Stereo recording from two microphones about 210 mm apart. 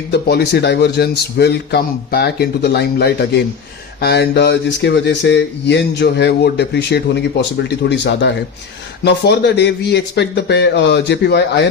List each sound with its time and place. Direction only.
0.1 s a man's voice: 50° left (ahead or behind)